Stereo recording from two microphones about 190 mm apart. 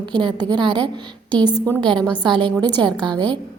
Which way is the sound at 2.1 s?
25° right (ahead or behind).